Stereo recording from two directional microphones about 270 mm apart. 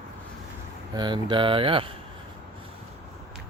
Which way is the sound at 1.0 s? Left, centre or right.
Centre.